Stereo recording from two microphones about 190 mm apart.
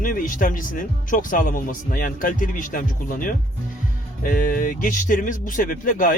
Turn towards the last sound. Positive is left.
turn(degrees=50)  # may be behind; listen again after turning